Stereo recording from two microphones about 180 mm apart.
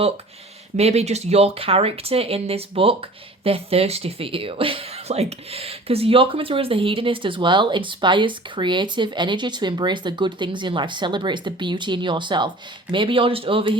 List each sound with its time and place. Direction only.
0.8 s speech: 35° right (ahead or behind)